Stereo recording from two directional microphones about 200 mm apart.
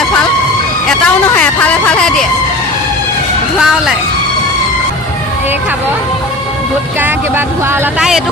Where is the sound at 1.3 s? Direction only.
5° left (ahead or behind).